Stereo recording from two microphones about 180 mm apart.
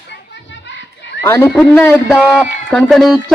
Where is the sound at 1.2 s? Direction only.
15° left (ahead or behind).